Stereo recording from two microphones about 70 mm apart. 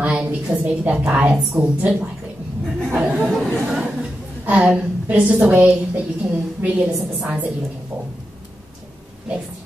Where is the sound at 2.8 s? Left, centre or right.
Right.